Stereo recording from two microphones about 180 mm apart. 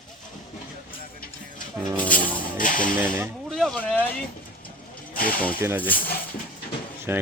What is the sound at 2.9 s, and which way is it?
Speech, 10° right (ahead or behind).